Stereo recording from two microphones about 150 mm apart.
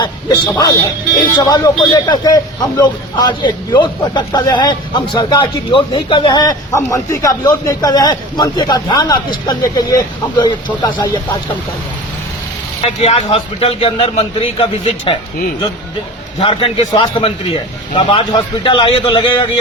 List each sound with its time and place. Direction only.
0.5 s a man's voice: 25° left (ahead or behind)
12.8 s a man's voice: 40° left (ahead or behind)
16.4 s a man's voice: 35° left (ahead or behind)